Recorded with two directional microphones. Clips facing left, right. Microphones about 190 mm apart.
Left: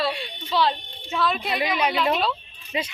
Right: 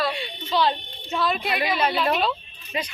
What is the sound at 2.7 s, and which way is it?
Speech, 20° left (ahead or behind).